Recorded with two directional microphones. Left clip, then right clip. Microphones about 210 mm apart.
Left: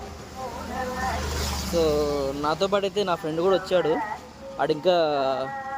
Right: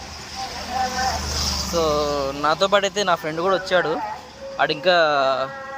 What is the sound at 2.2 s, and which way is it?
Speech, 20° right (ahead or behind).